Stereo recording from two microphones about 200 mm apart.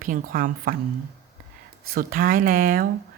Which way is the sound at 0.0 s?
45° right (ahead or behind).